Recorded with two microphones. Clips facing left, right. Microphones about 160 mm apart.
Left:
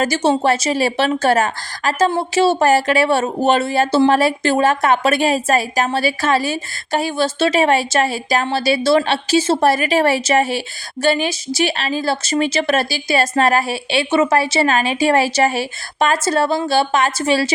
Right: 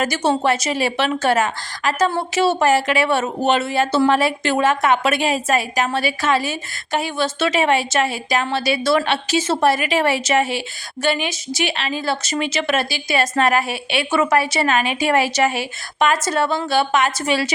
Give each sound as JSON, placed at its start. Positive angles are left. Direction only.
{"t": 0.0, "sound": "a woman's voice", "side_deg": 30}